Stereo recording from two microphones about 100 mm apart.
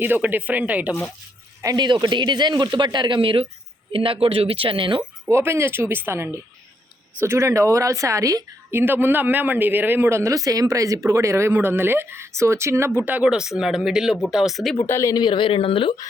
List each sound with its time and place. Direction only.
0.0 s speech: 20° right (ahead or behind)
1.6 s speech: 45° right (ahead or behind)
5.3 s speech: 25° right (ahead or behind)
8.7 s speech: 20° right (ahead or behind); by 14.8 s centre (ahead or behind)
14.8 s speech: 25° left (ahead or behind)
15.1 s speech: 50° left (ahead or behind)